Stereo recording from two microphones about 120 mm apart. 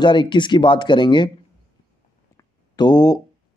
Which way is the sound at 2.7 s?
35° left (ahead or behind).